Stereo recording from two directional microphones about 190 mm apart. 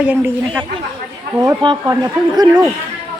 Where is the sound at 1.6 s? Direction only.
25° right (ahead or behind).